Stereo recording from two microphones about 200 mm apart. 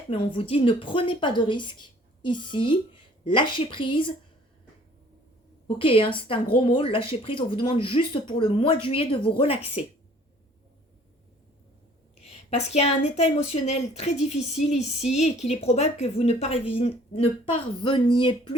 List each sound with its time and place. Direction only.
0.1 s a woman's voice: 25° left (ahead or behind)
5.6 s a woman's voice: 25° left (ahead or behind)
12.2 s a woman's voice: 35° left (ahead or behind)